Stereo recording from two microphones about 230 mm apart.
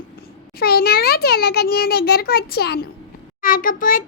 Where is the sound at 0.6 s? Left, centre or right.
Left.